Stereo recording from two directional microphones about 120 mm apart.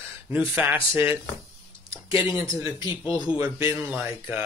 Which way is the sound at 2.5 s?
30° right (ahead or behind).